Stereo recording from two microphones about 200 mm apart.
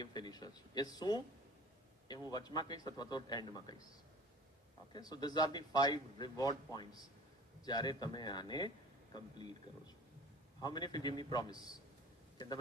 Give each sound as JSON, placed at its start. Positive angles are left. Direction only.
{"t": 0.0, "sound": "a man's voice", "side_deg": 20}
{"t": 4.9, "sound": "a man's voice", "side_deg": 20}
{"t": 10.6, "sound": "a man's voice", "side_deg": 20}